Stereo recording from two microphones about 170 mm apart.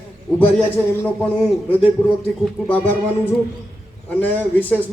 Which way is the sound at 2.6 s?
10° left (ahead or behind).